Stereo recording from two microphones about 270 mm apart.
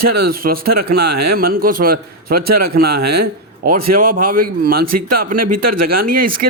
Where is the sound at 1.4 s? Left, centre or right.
Right.